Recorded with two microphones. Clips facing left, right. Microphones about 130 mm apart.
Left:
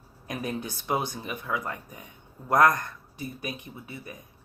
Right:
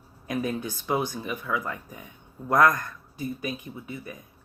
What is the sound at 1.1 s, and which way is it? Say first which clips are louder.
Speech: right 3 dB; 25° left (ahead or behind).